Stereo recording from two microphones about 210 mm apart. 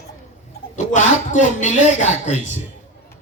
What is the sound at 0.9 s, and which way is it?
Speech, 35° left (ahead or behind).